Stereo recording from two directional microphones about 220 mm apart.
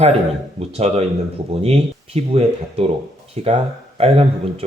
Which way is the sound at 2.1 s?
25° right (ahead or behind).